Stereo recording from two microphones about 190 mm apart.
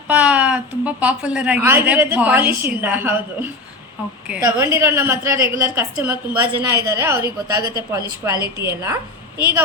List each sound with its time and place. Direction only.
0.1 s a woman's voice: 5° right (ahead or behind)